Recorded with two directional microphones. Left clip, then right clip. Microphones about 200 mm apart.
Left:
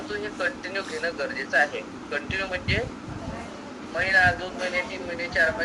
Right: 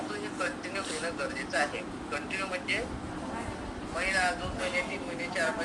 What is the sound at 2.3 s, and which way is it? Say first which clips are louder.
Speech: left 4 dB; 55° left (ahead or behind).